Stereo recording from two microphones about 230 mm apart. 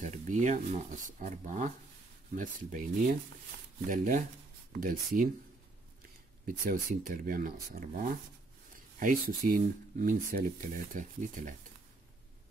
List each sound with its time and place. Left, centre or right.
0.0 s speech: right
6.4 s speech: right